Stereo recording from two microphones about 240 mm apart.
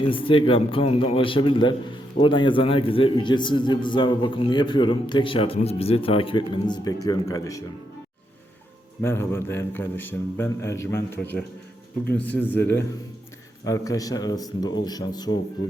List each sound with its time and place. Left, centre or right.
0.1 s a man's voice: left
9.0 s a man's voice: centre